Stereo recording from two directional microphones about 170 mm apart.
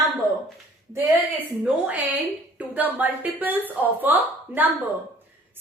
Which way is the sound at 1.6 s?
10° right (ahead or behind).